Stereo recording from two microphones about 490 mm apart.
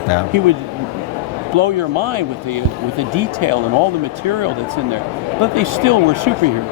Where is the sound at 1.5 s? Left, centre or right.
Right.